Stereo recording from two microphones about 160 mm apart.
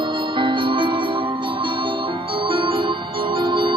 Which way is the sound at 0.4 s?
30° right (ahead or behind).